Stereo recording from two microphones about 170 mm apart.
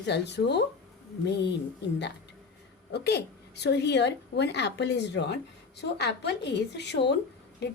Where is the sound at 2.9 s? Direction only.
75° left (ahead or behind).